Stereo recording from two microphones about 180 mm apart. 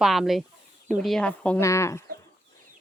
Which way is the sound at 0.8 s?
5° left (ahead or behind).